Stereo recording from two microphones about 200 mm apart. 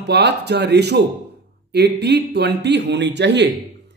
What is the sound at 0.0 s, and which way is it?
Speech, 55° right (ahead or behind).